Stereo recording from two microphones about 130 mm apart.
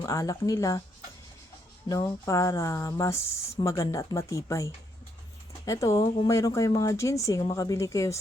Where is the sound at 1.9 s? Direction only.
25° left (ahead or behind).